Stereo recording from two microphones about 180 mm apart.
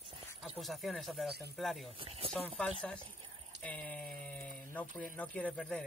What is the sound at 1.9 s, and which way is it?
Speech, 30° right (ahead or behind).